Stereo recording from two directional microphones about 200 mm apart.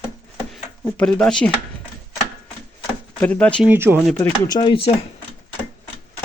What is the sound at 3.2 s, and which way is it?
Speech, 5° left (ahead or behind).